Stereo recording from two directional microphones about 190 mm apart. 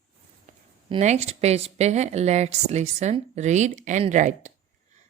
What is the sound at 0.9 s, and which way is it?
A woman's voice, 35° right (ahead or behind).